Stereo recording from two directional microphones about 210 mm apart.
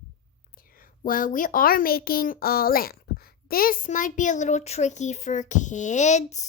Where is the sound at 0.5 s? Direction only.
40° left (ahead or behind).